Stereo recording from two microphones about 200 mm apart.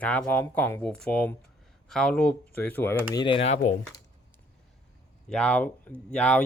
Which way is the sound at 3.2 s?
30° left (ahead or behind).